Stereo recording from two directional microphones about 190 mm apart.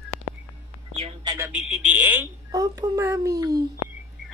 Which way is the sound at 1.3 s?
10° right (ahead or behind).